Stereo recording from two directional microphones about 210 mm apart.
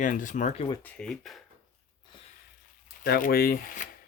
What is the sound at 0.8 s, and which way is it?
Speech, 5° left (ahead or behind).